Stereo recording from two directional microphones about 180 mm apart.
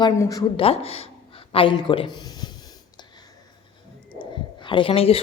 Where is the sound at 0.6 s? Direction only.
35° left (ahead or behind).